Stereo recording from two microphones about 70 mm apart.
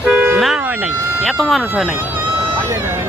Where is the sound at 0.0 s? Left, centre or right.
Right.